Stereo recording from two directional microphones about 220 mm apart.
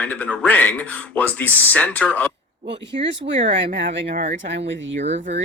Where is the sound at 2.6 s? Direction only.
55° right (ahead or behind).